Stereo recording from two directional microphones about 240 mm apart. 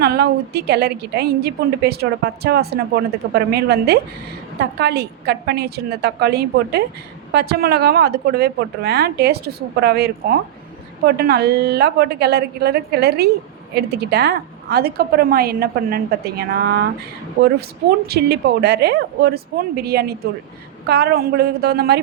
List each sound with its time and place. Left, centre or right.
0.0 s a woman's voice: right